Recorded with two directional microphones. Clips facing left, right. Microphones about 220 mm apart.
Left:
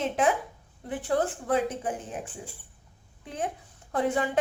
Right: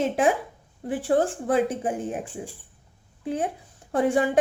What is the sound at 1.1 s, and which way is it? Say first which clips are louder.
Speech: right 5 dB; 30° right (ahead or behind).